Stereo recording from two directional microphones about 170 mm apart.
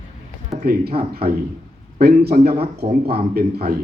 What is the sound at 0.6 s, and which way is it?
A man's voice, 65° right (ahead or behind).